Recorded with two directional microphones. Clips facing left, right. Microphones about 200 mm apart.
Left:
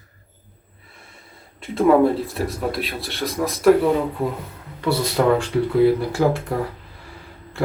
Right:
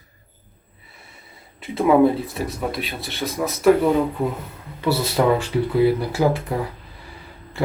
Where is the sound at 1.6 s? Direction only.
Centre (ahead or behind).